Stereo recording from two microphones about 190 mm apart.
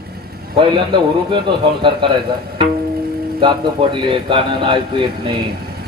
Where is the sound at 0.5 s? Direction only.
25° right (ahead or behind).